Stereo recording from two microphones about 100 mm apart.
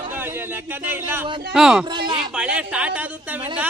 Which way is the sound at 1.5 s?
5° right (ahead or behind).